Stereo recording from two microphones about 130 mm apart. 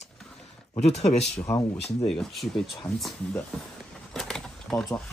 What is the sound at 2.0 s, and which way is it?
Speech, centre (ahead or behind).